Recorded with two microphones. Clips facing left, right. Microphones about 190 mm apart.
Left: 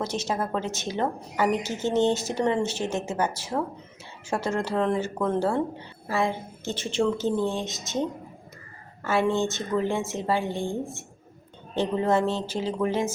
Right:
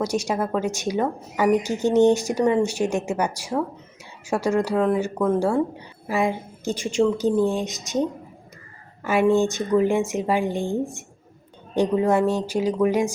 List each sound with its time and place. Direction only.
0.3 s speech: 10° right (ahead or behind)
9.0 s speech: 15° right (ahead or behind)